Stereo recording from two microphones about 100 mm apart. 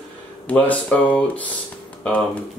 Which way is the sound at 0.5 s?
15° left (ahead or behind).